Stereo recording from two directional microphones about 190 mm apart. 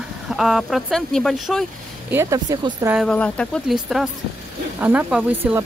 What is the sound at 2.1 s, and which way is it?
Speech, 15° right (ahead or behind).